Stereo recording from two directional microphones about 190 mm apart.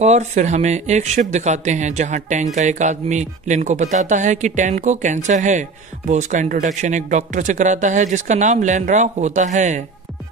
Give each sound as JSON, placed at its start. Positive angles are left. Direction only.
{"t": 0.0, "sound": "speech", "side_deg": -35}